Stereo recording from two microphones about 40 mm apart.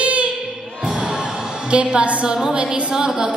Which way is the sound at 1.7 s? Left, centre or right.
Right.